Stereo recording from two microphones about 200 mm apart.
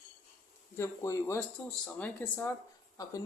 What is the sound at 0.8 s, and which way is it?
Speech, 15° left (ahead or behind).